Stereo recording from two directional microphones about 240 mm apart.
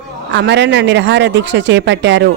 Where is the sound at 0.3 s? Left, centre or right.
Right.